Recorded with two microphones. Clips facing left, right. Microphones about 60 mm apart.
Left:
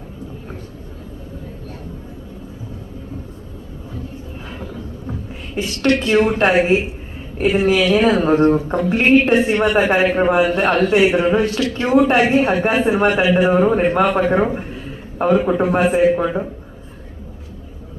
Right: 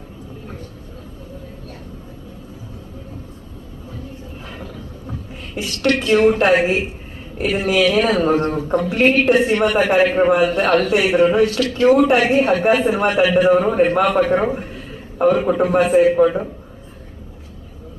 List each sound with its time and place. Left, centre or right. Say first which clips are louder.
6.1 s speech: right 4 dB; left